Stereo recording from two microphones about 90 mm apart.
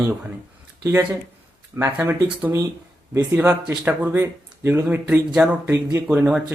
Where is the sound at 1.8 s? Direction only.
25° right (ahead or behind).